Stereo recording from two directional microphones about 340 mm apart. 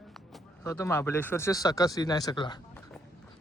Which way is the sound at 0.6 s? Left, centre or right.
Centre.